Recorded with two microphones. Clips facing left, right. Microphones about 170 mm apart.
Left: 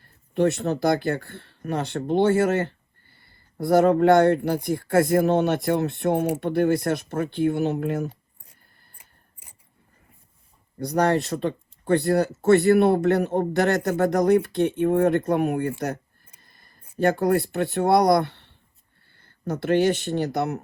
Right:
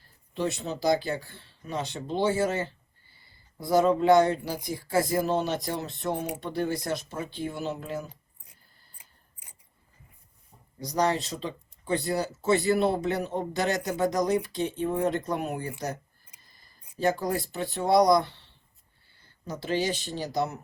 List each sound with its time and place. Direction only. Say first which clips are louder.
0.0 s speech: left 9 dB; 60° left (ahead or behind)
10.8 s speech: left 5 dB; 60° left (ahead or behind)
16.4 s a sound: left 5 dB; 60° left (ahead or behind)
17.0 s speech: left 6 dB; 60° left (ahead or behind)